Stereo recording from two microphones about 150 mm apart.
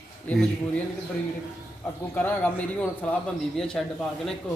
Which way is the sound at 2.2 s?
10° left (ahead or behind).